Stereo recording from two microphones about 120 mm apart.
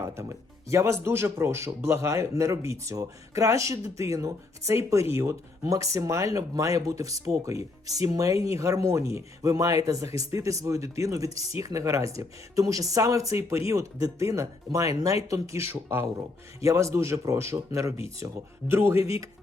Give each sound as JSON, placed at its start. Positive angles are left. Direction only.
{"t": 0.0, "sound": "speech", "side_deg": -25}